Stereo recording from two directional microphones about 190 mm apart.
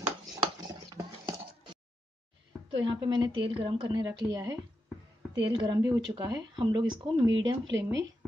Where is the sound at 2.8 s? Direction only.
25° right (ahead or behind).